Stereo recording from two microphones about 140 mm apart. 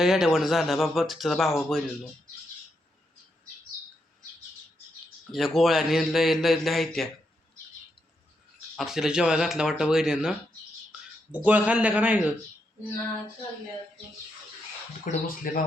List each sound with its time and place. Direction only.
0.0 s speech: centre (ahead or behind)
5.3 s speech: centre (ahead or behind)
8.7 s speech: centre (ahead or behind)
11.4 s a man's voice: 10° right (ahead or behind)
15.1 s speech: 70° left (ahead or behind)